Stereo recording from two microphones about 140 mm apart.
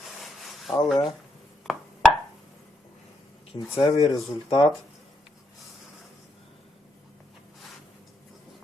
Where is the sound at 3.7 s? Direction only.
25° left (ahead or behind).